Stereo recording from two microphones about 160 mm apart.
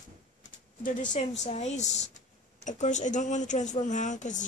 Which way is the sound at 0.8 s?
50° left (ahead or behind).